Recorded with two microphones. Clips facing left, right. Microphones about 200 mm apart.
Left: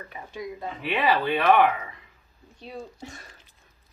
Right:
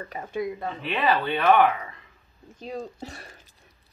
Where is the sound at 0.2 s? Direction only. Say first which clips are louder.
Right 6 dB; 60° right (ahead or behind).